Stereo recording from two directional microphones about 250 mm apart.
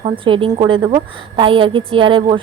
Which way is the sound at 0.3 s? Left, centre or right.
Centre.